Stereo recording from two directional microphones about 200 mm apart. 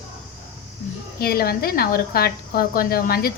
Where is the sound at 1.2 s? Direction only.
50° left (ahead or behind).